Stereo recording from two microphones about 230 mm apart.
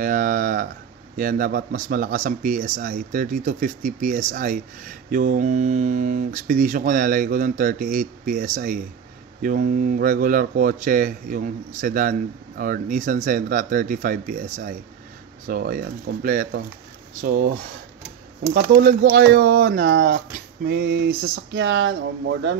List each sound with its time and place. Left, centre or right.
0.0 s a sound: right
1.1 s speech: right
18.5 s speech: right